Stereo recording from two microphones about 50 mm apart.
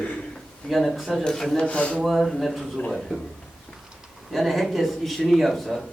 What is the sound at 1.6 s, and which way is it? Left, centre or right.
Speech, left.